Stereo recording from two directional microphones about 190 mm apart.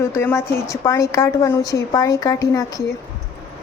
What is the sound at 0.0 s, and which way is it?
A woman's voice, 15° left (ahead or behind).